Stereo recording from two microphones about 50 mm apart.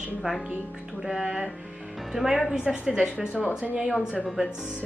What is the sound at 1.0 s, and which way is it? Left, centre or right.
A woman's voice, centre.